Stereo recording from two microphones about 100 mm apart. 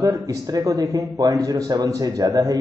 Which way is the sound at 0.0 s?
35° right (ahead or behind).